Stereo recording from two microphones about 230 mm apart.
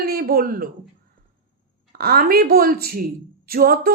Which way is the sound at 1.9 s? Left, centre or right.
Right.